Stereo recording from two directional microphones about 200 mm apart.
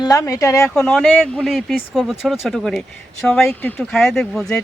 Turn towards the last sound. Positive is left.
turn(degrees=0)  # may be behind; listen again after turning